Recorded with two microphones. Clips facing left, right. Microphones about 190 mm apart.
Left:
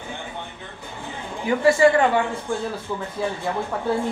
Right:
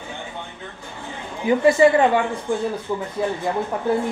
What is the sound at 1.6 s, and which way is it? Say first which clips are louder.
Speech: right 1 dB; 20° right (ahead or behind).